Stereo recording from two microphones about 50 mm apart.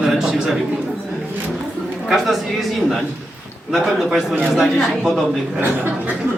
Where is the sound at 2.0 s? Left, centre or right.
Centre.